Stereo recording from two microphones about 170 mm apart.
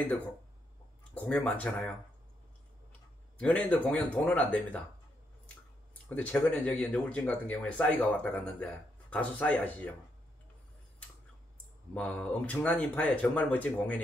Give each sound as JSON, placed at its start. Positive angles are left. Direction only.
{"t": 1.1, "sound": "speech", "side_deg": 5}
{"t": 3.3, "sound": "speech", "side_deg": 5}
{"t": 6.0, "sound": "speech", "side_deg": 10}
{"t": 11.9, "sound": "speech", "side_deg": 5}